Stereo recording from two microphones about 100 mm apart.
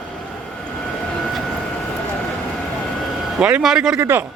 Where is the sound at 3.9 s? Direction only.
25° right (ahead or behind).